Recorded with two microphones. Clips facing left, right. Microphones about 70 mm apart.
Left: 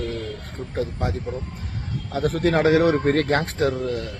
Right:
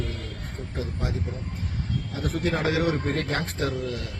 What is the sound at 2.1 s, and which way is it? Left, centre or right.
A man's voice, left.